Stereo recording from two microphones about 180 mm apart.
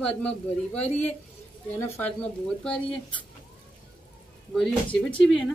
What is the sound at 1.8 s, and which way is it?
Speech, 10° left (ahead or behind).